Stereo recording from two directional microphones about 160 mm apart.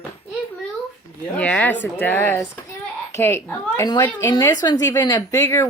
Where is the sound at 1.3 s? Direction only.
10° left (ahead or behind).